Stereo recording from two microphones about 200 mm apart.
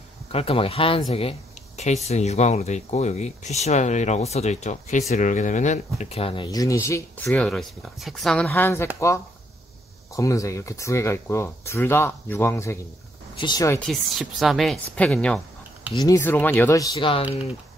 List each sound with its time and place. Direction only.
0.3 s speech: 30° left (ahead or behind)
7.2 s a woman's voice: centre (ahead or behind)
10.1 s speech: 15° left (ahead or behind)
13.7 s a woman's voice: centre (ahead or behind); by 17.6 s 25° left (ahead or behind)